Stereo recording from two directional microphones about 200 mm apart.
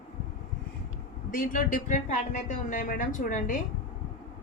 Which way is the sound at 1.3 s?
45° left (ahead or behind).